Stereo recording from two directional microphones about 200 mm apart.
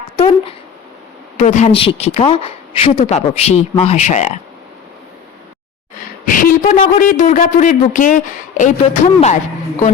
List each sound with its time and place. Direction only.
1.4 s a man's voice: 35° left (ahead or behind)
6.2 s a man's voice: 45° left (ahead or behind)